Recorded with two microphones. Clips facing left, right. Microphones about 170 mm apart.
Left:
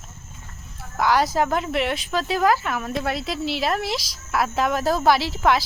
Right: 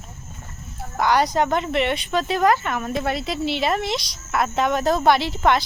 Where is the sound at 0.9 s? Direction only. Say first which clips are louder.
Right 1 dB; centre (ahead or behind).